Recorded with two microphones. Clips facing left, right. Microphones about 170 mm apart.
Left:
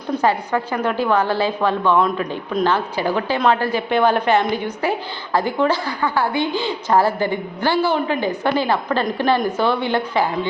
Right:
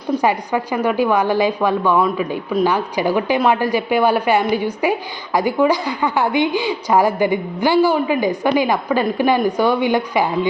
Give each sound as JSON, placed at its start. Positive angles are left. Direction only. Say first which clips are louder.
{"t": 0.2, "sound": "a woman's voice", "louder": "right 1 dB", "side_deg": -15}